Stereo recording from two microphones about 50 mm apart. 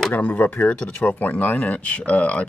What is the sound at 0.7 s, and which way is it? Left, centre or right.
Speech, left.